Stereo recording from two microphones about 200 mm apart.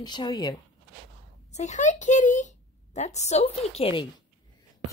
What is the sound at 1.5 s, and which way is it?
A child's voice, 35° left (ahead or behind).